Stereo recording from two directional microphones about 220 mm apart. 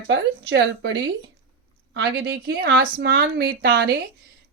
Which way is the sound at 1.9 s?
50° right (ahead or behind).